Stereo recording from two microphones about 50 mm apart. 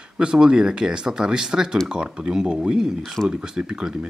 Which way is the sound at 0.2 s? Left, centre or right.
Centre.